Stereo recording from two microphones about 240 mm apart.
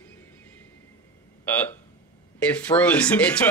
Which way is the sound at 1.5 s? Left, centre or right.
Centre.